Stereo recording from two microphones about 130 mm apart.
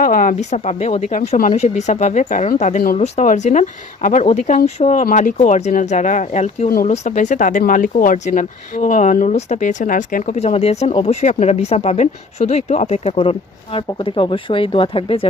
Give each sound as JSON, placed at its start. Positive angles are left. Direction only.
{"t": 0.0, "sound": "speech", "side_deg": 90}
{"t": 10.3, "sound": "speech", "side_deg": 55}